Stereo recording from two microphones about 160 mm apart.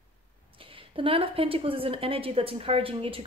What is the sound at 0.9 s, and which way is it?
Speech, 35° right (ahead or behind).